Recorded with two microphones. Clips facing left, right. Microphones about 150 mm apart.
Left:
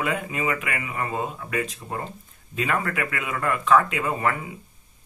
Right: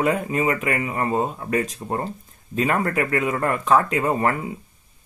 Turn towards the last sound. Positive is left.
turn(degrees=-40)  # may be behind; listen again after turning